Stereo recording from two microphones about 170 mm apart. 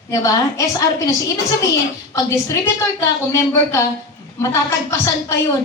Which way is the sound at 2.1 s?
20° left (ahead or behind).